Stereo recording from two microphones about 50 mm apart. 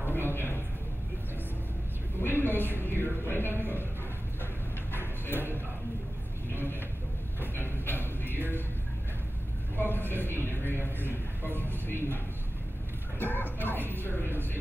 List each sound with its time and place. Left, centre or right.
0.0 s music: left
2.1 s a woman's voice: left
6.5 s a sound: left
7.5 s music: left
9.8 s a sound: left
11.6 s speech: left
13.2 s music: left